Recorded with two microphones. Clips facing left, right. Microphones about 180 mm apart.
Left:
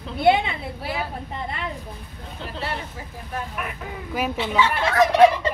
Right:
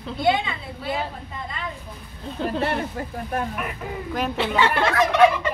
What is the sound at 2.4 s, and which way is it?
Speech, 50° right (ahead or behind).